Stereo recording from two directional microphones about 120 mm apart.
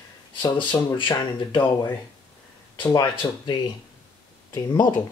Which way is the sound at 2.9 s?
35° left (ahead or behind).